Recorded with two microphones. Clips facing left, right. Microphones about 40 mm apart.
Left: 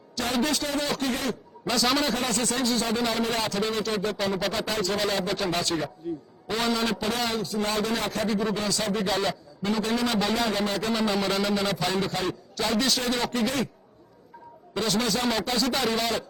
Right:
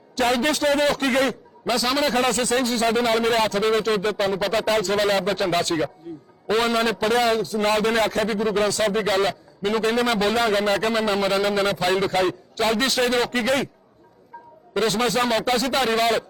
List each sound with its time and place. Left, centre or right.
0.2 s a man's voice: right
1.7 s a man's voice: centre
2.0 s a man's voice: right
11.9 s a man's voice: right
14.7 s a man's voice: right